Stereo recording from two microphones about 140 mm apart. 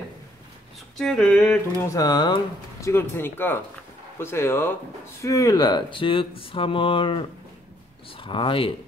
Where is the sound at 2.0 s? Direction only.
30° left (ahead or behind).